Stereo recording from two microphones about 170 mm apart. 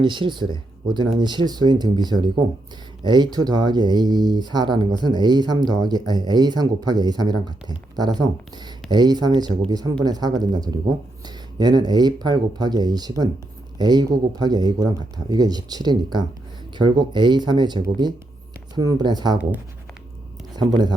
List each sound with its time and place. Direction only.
0.0 s speech: 30° right (ahead or behind)
20.6 s speech: 25° right (ahead or behind)